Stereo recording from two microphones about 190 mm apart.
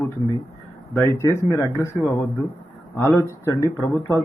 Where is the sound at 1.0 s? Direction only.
15° left (ahead or behind).